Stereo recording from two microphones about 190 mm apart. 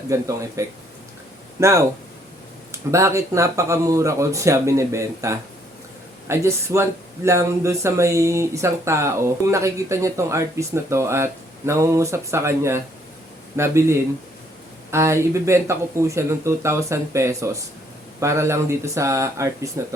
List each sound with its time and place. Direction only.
0.1 s speech: 15° right (ahead or behind)